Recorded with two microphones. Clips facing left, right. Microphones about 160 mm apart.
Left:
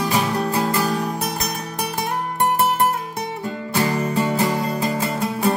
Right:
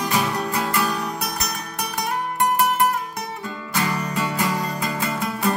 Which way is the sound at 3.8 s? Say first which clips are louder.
Left 4 dB; 25° left (ahead or behind).